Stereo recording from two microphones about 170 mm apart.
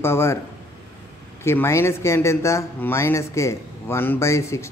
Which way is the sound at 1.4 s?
15° left (ahead or behind).